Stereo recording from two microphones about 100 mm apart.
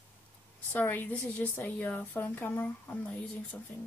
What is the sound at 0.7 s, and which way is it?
A woman's voice, 20° left (ahead or behind).